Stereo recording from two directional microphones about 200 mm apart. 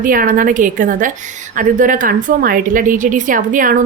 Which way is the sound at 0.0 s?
45° right (ahead or behind).